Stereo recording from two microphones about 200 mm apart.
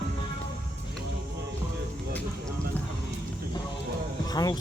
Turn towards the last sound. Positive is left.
turn(degrees=20)  # may be behind; listen again after turning